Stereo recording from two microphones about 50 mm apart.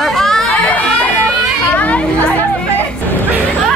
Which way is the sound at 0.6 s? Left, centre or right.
Left.